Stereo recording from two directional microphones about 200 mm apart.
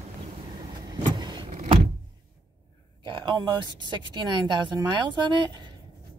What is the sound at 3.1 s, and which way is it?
A woman's voice, 20° right (ahead or behind).